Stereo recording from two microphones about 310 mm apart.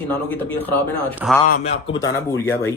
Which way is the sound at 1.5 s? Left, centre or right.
Left.